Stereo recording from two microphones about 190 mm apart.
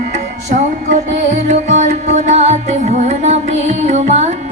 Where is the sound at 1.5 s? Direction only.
40° right (ahead or behind).